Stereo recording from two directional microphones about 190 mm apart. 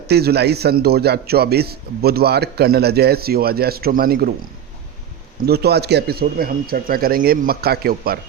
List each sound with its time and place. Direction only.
0.1 s a man's voice: 55° right (ahead or behind)
5.5 s speech: 60° right (ahead or behind)